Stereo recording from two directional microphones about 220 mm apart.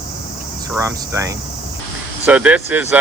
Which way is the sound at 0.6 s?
15° right (ahead or behind).